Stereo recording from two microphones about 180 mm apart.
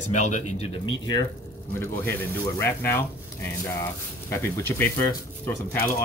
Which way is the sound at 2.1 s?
15° left (ahead or behind).